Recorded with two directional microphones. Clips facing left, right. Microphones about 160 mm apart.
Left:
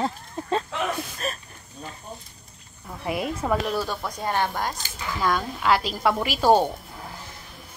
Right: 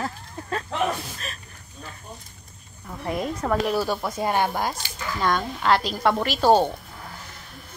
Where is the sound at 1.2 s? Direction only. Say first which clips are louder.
Left 8 dB; 45° left (ahead or behind).